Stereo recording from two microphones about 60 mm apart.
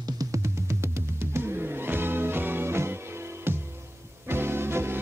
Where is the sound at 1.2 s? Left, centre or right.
Right.